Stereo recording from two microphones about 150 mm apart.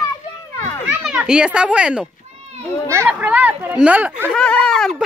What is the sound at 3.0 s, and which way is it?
Speech, 10° right (ahead or behind).